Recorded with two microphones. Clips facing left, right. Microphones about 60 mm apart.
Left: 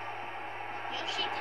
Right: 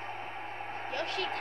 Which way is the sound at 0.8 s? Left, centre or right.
Right.